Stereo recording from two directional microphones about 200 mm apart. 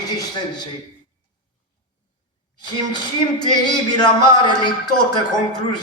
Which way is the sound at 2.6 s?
20° left (ahead or behind).